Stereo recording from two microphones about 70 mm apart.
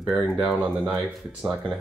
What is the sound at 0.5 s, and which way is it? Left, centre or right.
Speech, centre.